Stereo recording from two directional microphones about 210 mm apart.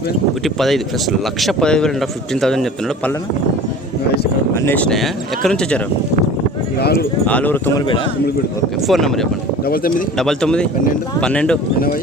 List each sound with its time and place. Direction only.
0.4 s a man's voice: centre (ahead or behind)
4.5 s a man's voice: 10° left (ahead or behind)
6.7 s speech: 50° left (ahead or behind)
7.3 s speech: 10° left (ahead or behind)
8.9 s a man's voice: centre (ahead or behind)
9.6 s speech: 45° left (ahead or behind)
10.2 s a man's voice: 5° left (ahead or behind)